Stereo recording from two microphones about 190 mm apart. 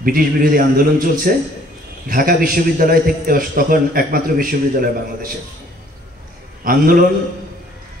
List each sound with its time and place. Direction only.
0.0 s a man's voice: 50° right (ahead or behind)
6.6 s a man's voice: 50° right (ahead or behind)